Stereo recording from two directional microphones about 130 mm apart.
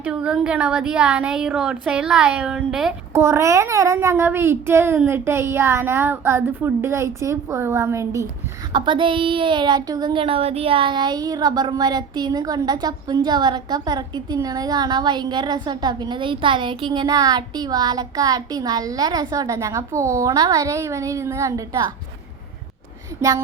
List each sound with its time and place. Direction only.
0.0 s a woman's voice: 10° right (ahead or behind)
3.1 s speech: 20° right (ahead or behind)
8.7 s a sound: 40° right (ahead or behind)